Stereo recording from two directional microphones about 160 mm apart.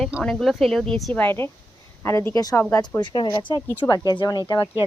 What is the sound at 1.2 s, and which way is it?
Speech, 15° left (ahead or behind).